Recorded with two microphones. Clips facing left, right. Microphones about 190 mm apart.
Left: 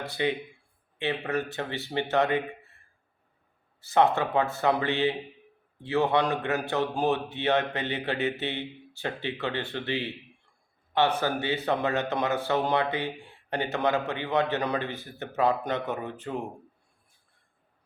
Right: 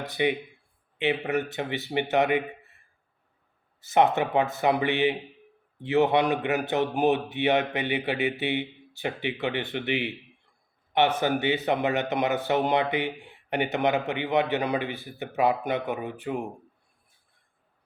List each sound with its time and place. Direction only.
0.1 s speech: 15° right (ahead or behind)
11.2 s speech: 20° right (ahead or behind)